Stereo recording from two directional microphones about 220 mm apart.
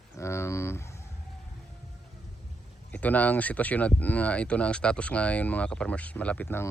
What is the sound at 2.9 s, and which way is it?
Speech, 5° left (ahead or behind).